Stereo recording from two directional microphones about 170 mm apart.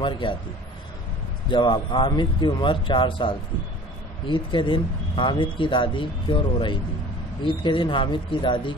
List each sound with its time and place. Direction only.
0.0 s speech: 30° left (ahead or behind)
1.5 s speech: 30° left (ahead or behind)